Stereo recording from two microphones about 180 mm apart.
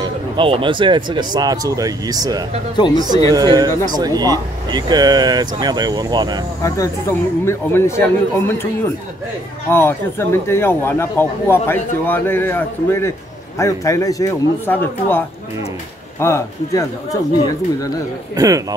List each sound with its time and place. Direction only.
0.0 s speech: 30° right (ahead or behind)
6.6 s a man's voice: 15° left (ahead or behind)
9.7 s a man's voice: 10° left (ahead or behind)
18.3 s speech: 20° right (ahead or behind)